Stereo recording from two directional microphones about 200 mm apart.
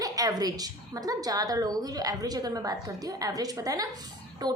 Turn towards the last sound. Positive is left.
turn(degrees=-20)  # may be behind; listen again after turning